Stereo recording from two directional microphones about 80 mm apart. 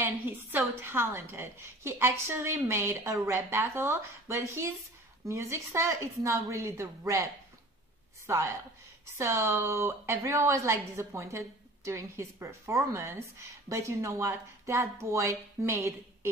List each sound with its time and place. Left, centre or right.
0.0 s a woman's voice: right
9.2 s a woman's voice: right